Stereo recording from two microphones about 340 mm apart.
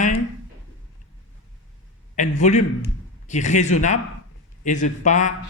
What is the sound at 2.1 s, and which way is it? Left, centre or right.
A man's voice, left.